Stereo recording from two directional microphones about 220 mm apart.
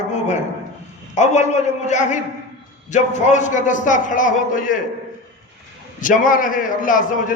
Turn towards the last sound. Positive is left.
turn(degrees=35)  # may be behind; listen again after turning